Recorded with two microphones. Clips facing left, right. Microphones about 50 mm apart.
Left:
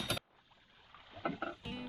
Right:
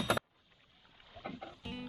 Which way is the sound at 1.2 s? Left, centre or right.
Left.